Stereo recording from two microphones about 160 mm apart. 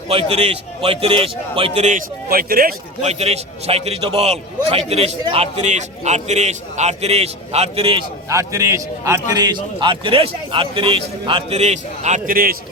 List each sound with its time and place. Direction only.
0.1 s a man's voice: 40° right (ahead or behind); by 2.7 s 65° right (ahead or behind)
3.0 s a man's voice: 40° right (ahead or behind)
8.3 s a man's voice: 20° right (ahead or behind); by 12.5 s 60° right (ahead or behind)